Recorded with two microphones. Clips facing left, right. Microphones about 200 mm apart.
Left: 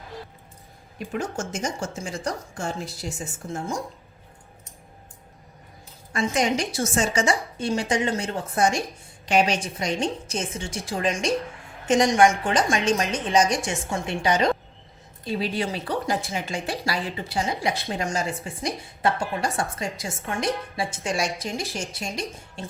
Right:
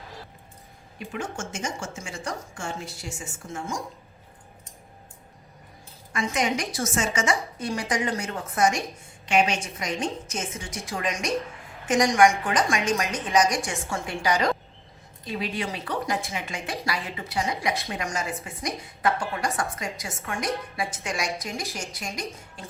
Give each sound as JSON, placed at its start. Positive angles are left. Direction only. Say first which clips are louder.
{"t": 0.9, "sound": "a woman's voice", "louder": "left 4 dB", "side_deg": 40}
{"t": 6.1, "sound": "a woman's voice", "louder": "left 3 dB", "side_deg": 35}